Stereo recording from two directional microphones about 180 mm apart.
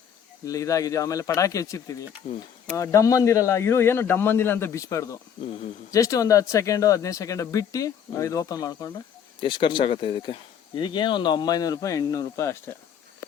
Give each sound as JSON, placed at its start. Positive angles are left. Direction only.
{"t": 0.4, "sound": "speech", "side_deg": 20}